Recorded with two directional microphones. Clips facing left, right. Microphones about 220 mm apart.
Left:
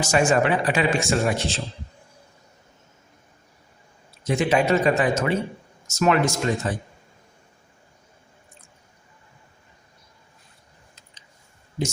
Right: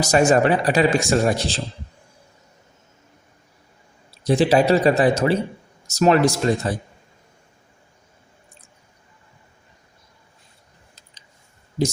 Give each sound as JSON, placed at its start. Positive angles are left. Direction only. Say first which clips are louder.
{"t": 0.0, "sound": "a man's voice", "louder": "right 4 dB", "side_deg": -40}
{"t": 4.1, "sound": "a man's voice", "louder": "right 5 dB", "side_deg": -35}